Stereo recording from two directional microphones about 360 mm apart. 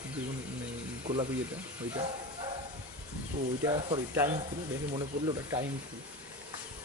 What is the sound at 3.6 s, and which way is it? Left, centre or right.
Speech, centre.